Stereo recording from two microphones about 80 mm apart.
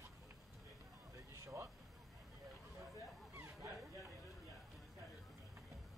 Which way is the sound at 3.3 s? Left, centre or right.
Right.